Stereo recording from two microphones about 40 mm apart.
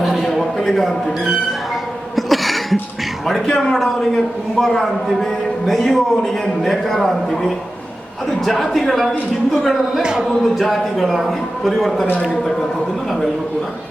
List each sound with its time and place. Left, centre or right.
0.0 s a sound: centre
2.1 s cough: centre
3.4 s a man's voice: centre
3.8 s a man's voice: centre
10.0 s speech: centre
10.2 s a man's voice: centre